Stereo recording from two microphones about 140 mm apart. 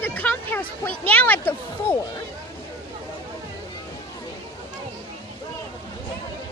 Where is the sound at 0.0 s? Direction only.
15° left (ahead or behind).